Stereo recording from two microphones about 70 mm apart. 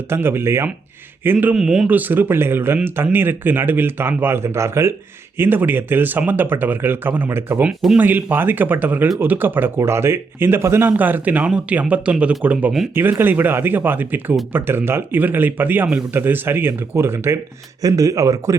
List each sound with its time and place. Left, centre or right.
0.1 s speech: right
1.5 s a man's voice: centre
1.9 s speech: right
5.4 s speech: right
7.7 s speech: centre
7.9 s speech: right
10.9 s speech: right
17.8 s speech: right